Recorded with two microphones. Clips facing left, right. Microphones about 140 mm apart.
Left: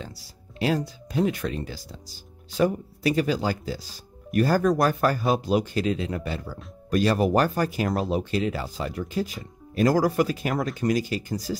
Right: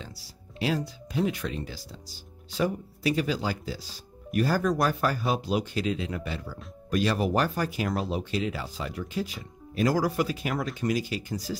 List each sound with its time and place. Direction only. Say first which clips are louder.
0.6 s speech: left 4 dB; 45° left (ahead or behind)